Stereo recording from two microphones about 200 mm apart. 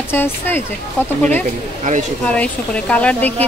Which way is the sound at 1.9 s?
45° right (ahead or behind).